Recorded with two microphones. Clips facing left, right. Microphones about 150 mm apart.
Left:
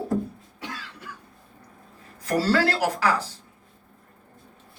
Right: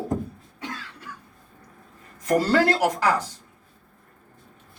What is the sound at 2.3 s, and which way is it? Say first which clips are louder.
Speech: right 1 dB; 15° right (ahead or behind).